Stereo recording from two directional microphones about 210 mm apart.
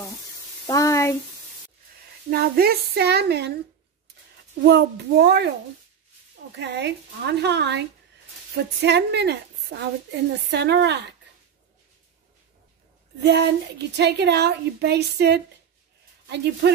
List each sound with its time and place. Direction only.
0.7 s a sound: 15° left (ahead or behind)
2.2 s a woman's voice: 45° right (ahead or behind)
4.6 s a woman's voice: 50° right (ahead or behind)
6.5 s a woman's voice: 55° right (ahead or behind)
13.2 s a woman's voice: 55° right (ahead or behind)